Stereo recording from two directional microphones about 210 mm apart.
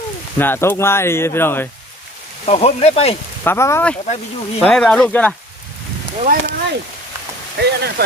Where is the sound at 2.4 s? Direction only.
30° left (ahead or behind).